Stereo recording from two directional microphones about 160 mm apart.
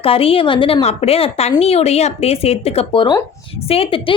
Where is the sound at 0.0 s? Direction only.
35° left (ahead or behind).